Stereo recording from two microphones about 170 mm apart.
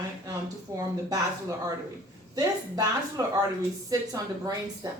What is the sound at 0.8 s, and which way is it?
Speech, 20° right (ahead or behind).